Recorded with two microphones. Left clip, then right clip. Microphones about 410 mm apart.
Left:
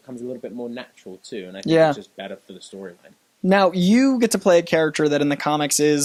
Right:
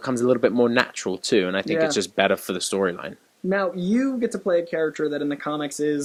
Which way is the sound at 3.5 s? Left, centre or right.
Left.